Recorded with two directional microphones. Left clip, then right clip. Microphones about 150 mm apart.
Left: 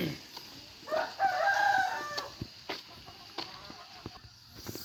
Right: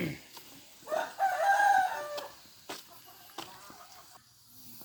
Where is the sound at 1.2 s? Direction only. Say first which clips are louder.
Even; 70° right (ahead or behind).